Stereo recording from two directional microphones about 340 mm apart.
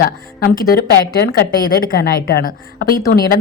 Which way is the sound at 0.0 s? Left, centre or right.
Left.